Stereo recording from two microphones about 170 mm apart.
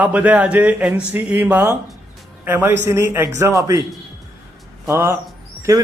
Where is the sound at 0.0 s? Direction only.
10° right (ahead or behind).